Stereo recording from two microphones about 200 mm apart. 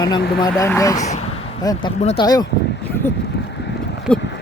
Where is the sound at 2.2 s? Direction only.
20° left (ahead or behind).